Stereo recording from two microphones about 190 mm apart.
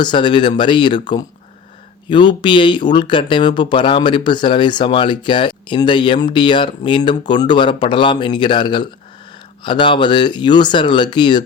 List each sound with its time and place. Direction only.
0.0 s speech: 25° left (ahead or behind)
2.0 s speech: 25° left (ahead or behind)